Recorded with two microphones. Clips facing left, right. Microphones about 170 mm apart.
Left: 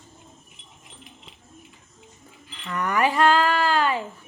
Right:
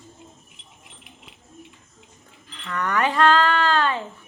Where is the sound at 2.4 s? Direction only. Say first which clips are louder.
Even; 10° left (ahead or behind).